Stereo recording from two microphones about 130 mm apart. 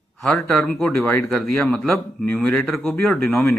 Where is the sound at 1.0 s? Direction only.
20° left (ahead or behind).